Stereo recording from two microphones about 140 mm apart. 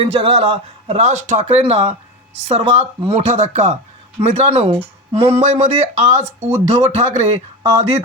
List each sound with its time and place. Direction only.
0.0 s a man's voice: 45° right (ahead or behind)